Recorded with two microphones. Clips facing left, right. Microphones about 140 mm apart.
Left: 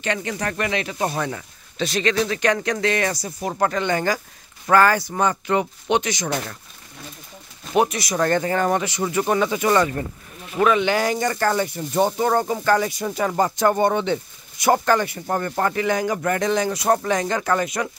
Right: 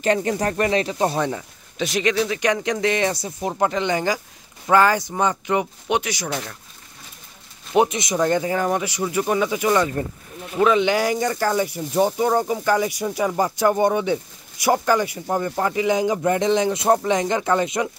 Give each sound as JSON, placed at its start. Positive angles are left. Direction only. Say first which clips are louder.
{"t": 0.0, "sound": "speech", "louder": "right 5 dB", "side_deg": -40}
{"t": 7.7, "sound": "speech", "louder": "right 1 dB", "side_deg": -20}
{"t": 10.6, "sound": "speech", "louder": "right 1 dB", "side_deg": -15}